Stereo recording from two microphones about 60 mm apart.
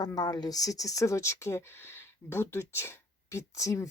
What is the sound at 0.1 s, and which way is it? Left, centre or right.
Speech, left.